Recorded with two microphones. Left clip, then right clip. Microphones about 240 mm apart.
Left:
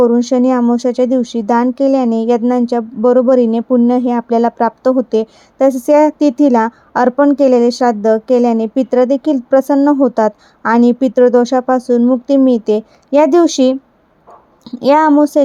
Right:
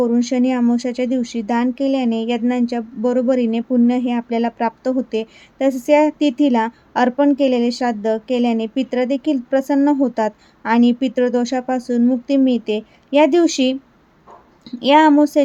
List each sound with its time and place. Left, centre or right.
0.0 s a woman's voice: centre